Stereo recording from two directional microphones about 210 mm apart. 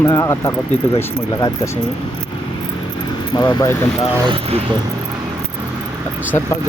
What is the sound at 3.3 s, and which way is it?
Speech, 20° left (ahead or behind).